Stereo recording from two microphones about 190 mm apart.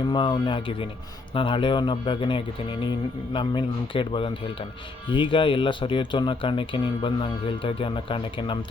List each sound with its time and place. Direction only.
0.1 s speech: 25° left (ahead or behind)